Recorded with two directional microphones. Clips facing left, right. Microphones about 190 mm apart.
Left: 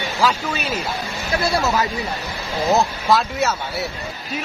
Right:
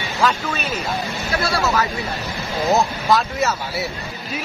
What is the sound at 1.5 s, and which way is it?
Speech, 20° left (ahead or behind).